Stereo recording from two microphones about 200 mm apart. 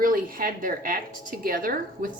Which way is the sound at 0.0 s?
45° right (ahead or behind).